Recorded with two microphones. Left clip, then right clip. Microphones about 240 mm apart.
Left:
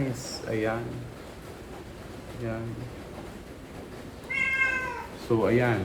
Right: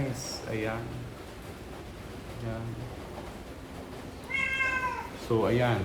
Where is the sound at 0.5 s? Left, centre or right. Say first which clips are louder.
Left 5 dB; centre.